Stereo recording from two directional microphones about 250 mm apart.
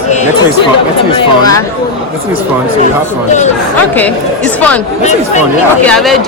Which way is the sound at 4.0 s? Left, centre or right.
Centre.